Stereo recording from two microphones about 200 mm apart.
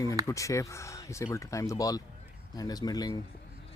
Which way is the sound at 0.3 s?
15° left (ahead or behind).